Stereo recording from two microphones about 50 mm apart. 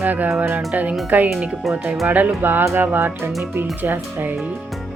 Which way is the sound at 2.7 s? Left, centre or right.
Right.